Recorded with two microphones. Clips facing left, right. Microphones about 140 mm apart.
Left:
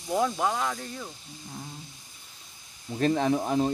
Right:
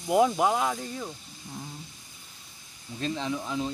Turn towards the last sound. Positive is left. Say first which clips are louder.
# left 6 dB
turn(degrees=50)  # may be behind; listen again after turning